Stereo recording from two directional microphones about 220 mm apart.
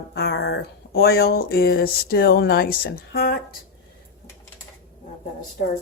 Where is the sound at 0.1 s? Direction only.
50° left (ahead or behind).